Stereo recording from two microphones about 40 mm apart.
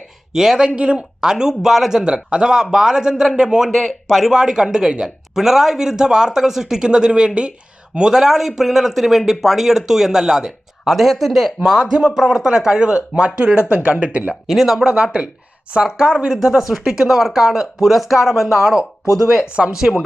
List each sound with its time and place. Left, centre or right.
0.3 s speech: centre
0.8 s speech: right
1.2 s speech: centre
3.7 s speech: centre
4.3 s speech: centre
10.9 s speech: centre; by 14.3 s right
14.4 s speech: centre
14.8 s speech: right
16.4 s speech: centre
18.6 s speech: centre